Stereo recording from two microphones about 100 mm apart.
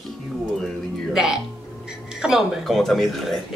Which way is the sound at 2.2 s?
5° right (ahead or behind).